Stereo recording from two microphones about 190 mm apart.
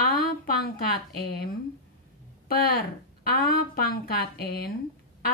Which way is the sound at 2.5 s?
50° left (ahead or behind).